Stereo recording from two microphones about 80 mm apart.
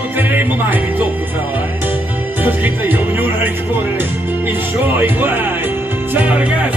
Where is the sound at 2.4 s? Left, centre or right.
Right.